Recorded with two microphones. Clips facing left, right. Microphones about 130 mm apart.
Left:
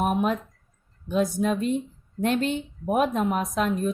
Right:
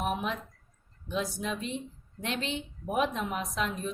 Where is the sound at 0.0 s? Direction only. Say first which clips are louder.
Left 8 dB; 50° left (ahead or behind).